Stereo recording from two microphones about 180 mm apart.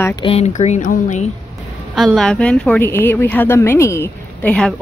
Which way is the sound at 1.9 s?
Centre (ahead or behind).